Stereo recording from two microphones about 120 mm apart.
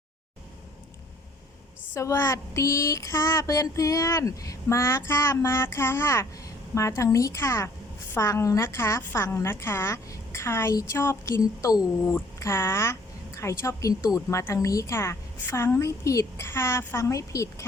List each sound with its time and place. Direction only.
2.0 s a woman's voice: 25° left (ahead or behind)